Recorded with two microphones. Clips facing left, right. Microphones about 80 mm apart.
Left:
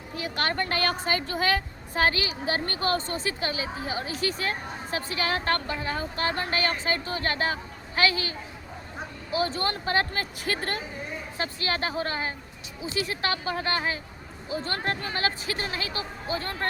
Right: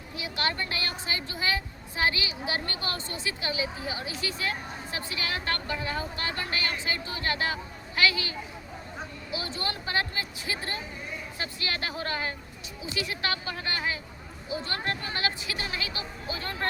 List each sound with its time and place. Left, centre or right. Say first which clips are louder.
0.2 s a woman's voice: left 3 dB; left
11.3 s a woman's voice: left 5 dB; left